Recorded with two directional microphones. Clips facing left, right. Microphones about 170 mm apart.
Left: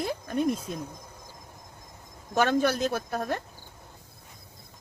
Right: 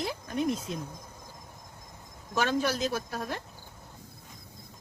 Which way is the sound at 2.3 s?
60° left (ahead or behind).